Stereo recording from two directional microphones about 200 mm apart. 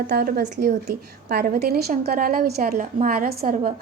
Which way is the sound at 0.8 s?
55° right (ahead or behind).